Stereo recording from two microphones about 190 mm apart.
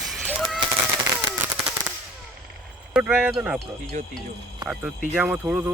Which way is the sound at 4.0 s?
40° right (ahead or behind).